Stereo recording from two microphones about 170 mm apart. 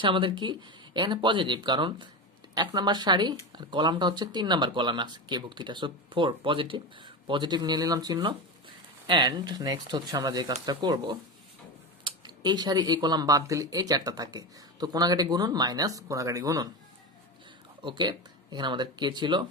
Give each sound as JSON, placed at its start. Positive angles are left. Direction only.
{"t": 0.0, "sound": "speech", "side_deg": -30}
{"t": 17.8, "sound": "speech", "side_deg": -25}